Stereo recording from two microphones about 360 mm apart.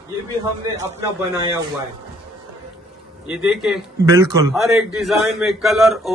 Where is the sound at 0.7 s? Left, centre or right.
Centre.